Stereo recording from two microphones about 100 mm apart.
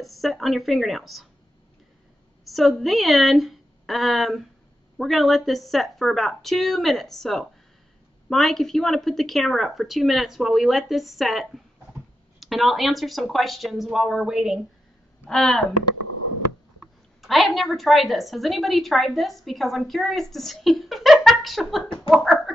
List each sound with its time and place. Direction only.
0.0 s a woman's voice: centre (ahead or behind)
2.4 s a woman's voice: centre (ahead or behind)
15.2 s a woman's voice: 5° left (ahead or behind)
17.2 s a woman's voice: centre (ahead or behind)
21.8 s speech: 60° left (ahead or behind)
22.1 s a woman's voice: centre (ahead or behind)